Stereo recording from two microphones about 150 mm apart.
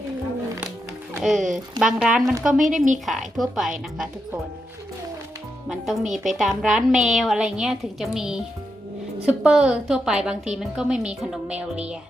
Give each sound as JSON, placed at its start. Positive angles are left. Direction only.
{"t": 1.1, "sound": "a woman's voice", "side_deg": 0}
{"t": 2.6, "sound": "a woman's voice", "side_deg": -55}
{"t": 3.1, "sound": "a woman's voice", "side_deg": 0}
{"t": 5.6, "sound": "a woman's voice", "side_deg": 0}